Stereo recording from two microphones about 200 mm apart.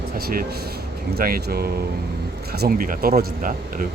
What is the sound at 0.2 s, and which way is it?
Speech, 50° right (ahead or behind).